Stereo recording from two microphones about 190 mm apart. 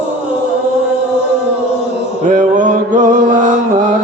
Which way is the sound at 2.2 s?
45° right (ahead or behind).